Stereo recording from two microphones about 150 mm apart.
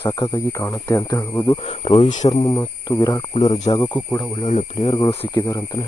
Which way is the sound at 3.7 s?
35° left (ahead or behind).